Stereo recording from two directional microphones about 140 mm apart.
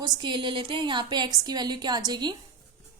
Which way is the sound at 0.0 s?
35° right (ahead or behind).